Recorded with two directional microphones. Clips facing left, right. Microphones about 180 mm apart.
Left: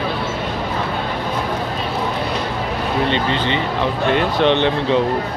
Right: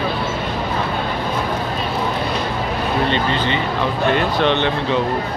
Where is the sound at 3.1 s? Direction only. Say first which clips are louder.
Even; 25° left (ahead or behind).